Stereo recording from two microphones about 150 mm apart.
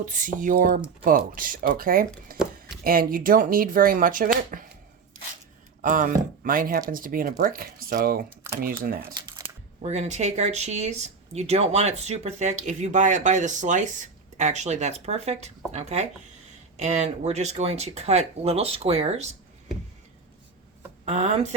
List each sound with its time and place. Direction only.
0.0 s speech: 60° right (ahead or behind)
5.8 s speech: 60° right (ahead or behind)
9.8 s speech: 50° right (ahead or behind)
21.0 s speech: 50° right (ahead or behind)